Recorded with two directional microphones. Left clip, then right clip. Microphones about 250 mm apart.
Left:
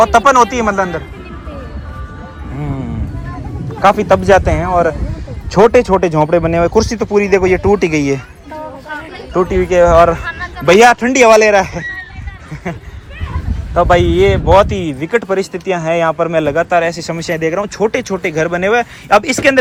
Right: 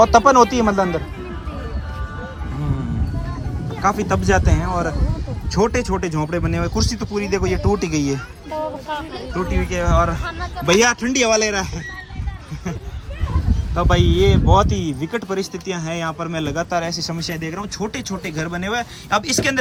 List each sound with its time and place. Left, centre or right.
0.0 s speech: right
3.8 s speech: centre
9.5 s speech: centre
13.7 s speech: centre